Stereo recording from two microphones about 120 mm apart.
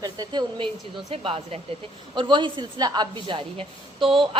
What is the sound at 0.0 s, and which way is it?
Speech, 35° right (ahead or behind).